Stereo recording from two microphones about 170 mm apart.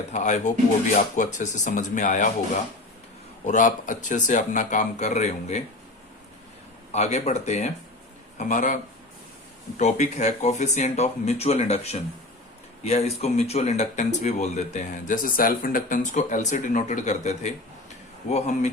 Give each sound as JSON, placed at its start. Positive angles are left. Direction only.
{"t": 0.1, "sound": "speech", "side_deg": 45}
{"t": 3.4, "sound": "speech", "side_deg": 45}
{"t": 6.9, "sound": "speech", "side_deg": 40}